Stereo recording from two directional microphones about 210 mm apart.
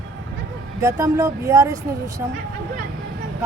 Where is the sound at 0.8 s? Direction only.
15° right (ahead or behind).